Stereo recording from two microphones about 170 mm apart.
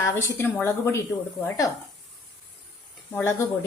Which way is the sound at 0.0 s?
15° left (ahead or behind).